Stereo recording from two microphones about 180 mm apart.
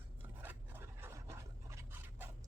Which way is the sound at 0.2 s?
10° right (ahead or behind).